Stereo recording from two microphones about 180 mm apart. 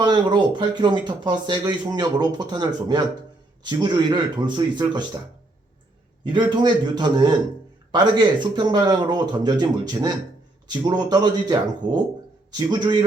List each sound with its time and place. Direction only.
0.0 s speech: 25° right (ahead or behind)
6.2 s speech: 25° right (ahead or behind)